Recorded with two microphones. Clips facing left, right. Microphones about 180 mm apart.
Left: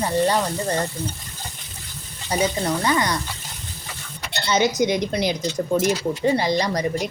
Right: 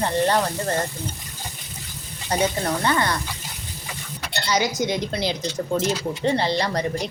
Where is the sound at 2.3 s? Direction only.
10° left (ahead or behind).